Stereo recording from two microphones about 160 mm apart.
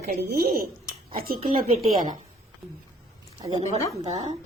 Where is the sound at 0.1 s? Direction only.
70° right (ahead or behind).